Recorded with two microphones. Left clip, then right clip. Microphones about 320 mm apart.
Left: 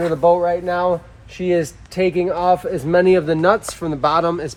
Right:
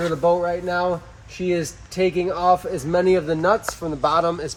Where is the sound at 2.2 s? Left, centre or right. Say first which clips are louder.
Left 2 dB; left.